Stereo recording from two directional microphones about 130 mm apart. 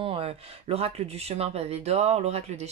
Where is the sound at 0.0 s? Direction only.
50° right (ahead or behind).